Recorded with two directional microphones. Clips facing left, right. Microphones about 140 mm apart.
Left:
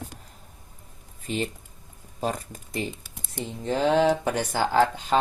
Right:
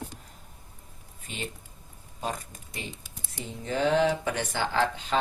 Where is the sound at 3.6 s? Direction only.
35° left (ahead or behind).